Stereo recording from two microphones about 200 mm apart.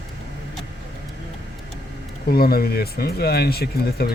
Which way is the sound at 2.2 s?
50° left (ahead or behind).